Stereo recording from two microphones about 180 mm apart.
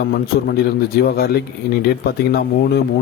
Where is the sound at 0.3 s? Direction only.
60° left (ahead or behind).